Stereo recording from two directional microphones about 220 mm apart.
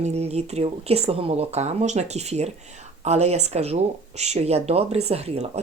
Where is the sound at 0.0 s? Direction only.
30° right (ahead or behind).